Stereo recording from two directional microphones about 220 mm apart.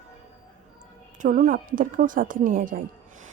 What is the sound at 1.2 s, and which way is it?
Speech, 35° right (ahead or behind).